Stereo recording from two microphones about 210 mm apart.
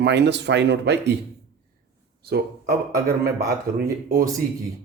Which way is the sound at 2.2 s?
50° right (ahead or behind).